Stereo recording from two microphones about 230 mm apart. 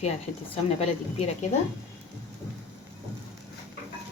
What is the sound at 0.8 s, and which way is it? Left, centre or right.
Speech, left.